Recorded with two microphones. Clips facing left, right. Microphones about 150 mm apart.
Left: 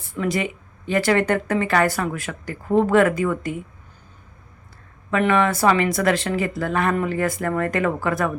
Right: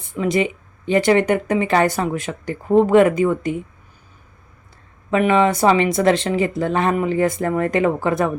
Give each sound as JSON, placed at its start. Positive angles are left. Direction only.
{"t": 0.0, "sound": "speech", "side_deg": -20}
{"t": 5.1, "sound": "speech", "side_deg": -20}